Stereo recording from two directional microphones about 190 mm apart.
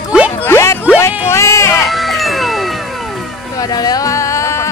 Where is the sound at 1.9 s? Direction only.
Centre (ahead or behind).